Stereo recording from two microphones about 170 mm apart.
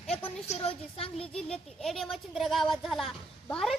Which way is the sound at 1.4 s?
5° left (ahead or behind).